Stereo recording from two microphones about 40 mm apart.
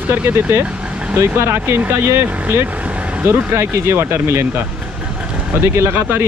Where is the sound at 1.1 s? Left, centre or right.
Right.